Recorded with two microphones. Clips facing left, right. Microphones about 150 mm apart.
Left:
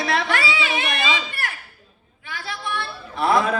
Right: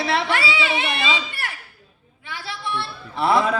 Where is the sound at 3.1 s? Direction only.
25° right (ahead or behind).